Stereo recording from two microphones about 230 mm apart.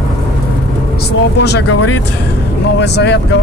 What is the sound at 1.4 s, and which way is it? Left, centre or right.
Speech, left.